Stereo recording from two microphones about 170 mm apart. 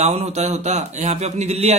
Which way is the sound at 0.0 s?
40° right (ahead or behind).